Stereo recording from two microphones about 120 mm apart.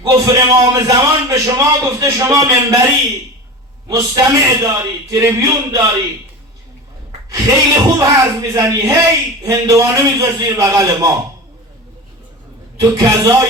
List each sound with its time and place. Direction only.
0.0 s a man's voice: 30° right (ahead or behind)
7.3 s a man's voice: 30° right (ahead or behind)
12.8 s speech: 30° right (ahead or behind)